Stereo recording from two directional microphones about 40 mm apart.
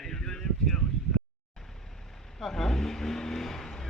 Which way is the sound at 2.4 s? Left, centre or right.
Centre.